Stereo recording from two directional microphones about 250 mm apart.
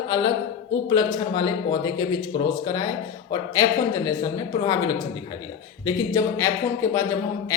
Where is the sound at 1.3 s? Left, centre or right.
Centre.